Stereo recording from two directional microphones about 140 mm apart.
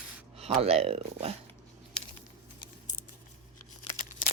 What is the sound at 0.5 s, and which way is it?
Speech, 45° right (ahead or behind).